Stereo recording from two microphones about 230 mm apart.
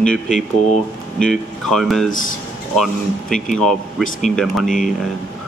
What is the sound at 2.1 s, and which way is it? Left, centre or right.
Speech, left.